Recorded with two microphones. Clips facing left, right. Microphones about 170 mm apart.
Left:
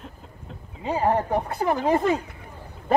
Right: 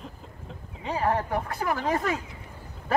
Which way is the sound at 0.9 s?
25° left (ahead or behind).